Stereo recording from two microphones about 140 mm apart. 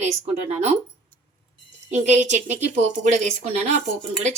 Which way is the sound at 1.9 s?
55° right (ahead or behind).